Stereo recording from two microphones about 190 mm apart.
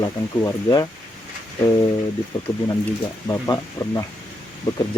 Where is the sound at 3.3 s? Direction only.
20° left (ahead or behind).